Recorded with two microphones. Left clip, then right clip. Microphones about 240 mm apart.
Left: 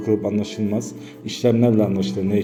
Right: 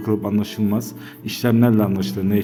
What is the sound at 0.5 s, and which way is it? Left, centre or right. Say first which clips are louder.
A man's voice: right 1 dB; right.